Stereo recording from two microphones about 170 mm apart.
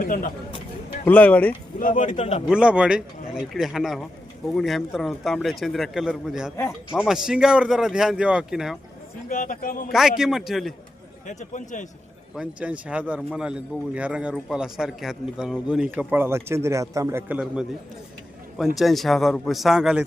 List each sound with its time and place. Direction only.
0.0 s speech: 50° left (ahead or behind)
1.0 s speech: 10° left (ahead or behind)
1.8 s speech: 50° left (ahead or behind)
2.5 s a man's voice: 5° right (ahead or behind)
9.3 s speech: 50° left (ahead or behind)
9.9 s a man's voice: centre (ahead or behind)
11.3 s speech: 45° left (ahead or behind)
12.4 s a man's voice: 5° right (ahead or behind)